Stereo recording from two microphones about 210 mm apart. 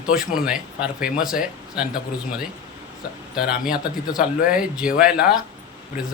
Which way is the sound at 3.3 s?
5° right (ahead or behind).